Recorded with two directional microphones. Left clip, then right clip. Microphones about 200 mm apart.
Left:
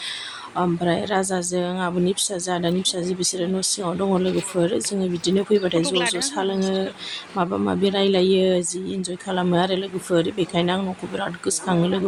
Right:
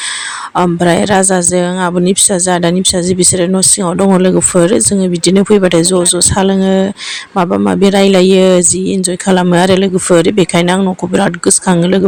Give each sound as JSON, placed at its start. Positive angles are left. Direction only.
{"t": 0.5, "sound": "a woman's voice", "side_deg": -40}